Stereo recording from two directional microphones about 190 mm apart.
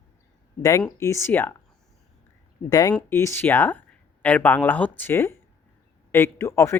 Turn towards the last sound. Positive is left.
turn(degrees=15)  # may be behind; listen again after turning